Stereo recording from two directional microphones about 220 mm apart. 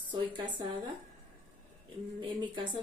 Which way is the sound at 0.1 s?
20° right (ahead or behind).